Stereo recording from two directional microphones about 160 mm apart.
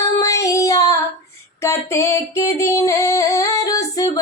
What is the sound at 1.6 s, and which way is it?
Female singing, 15° left (ahead or behind).